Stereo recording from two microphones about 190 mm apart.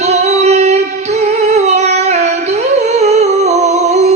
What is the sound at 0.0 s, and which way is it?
Music, 35° right (ahead or behind).